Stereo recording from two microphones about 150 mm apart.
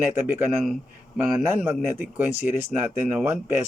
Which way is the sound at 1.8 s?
15° right (ahead or behind).